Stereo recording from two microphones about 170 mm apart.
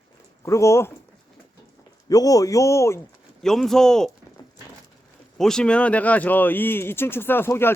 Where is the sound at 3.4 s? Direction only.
Centre (ahead or behind).